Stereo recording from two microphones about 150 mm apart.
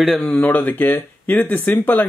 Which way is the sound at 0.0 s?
Centre (ahead or behind).